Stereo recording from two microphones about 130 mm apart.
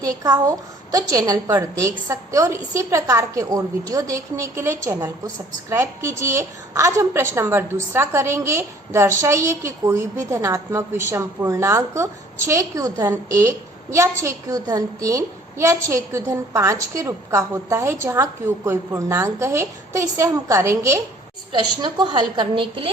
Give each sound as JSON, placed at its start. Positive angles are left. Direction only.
{"t": 0.0, "sound": "a woman's voice", "side_deg": -30}
{"t": 21.5, "sound": "a woman's voice", "side_deg": -35}